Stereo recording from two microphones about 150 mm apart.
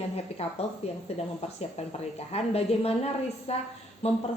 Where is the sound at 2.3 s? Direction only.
45° left (ahead or behind).